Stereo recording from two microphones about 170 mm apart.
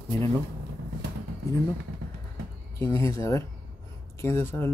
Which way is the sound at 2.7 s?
15° left (ahead or behind).